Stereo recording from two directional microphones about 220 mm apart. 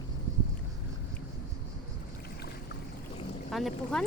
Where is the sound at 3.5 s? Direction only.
Centre (ahead or behind).